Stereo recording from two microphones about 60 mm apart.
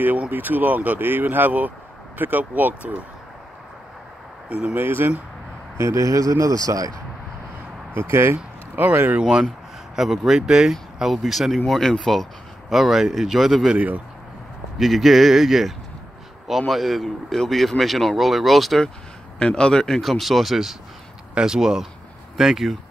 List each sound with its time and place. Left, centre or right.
0.3 s speech: right
4.7 s speech: right
5.8 s speech: right
7.9 s speech: right
9.2 s speech: centre
11.6 s speech: centre
13.7 s speech: right
14.8 s speech: centre
19.3 s speech: centre